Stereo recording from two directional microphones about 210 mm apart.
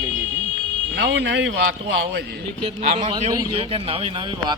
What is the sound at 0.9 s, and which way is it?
Speech, 55° right (ahead or behind).